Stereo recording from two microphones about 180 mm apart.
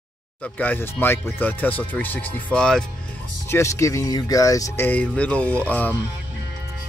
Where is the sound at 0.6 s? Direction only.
10° left (ahead or behind).